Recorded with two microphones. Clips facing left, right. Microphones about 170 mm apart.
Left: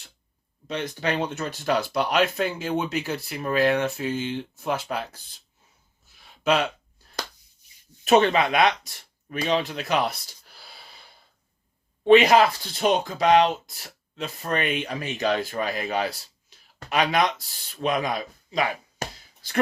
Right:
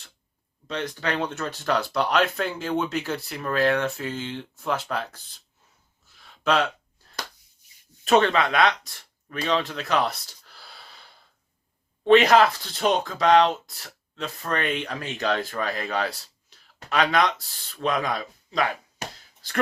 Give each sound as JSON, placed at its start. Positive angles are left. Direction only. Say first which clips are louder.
{"t": 0.7, "sound": "speech", "louder": "left 1 dB", "side_deg": 15}
{"t": 6.2, "sound": "a sound", "louder": "even", "side_deg": 15}
{"t": 8.1, "sound": "speech", "louder": "left 1 dB", "side_deg": 15}
{"t": 12.0, "sound": "speech", "louder": "left 1 dB", "side_deg": 10}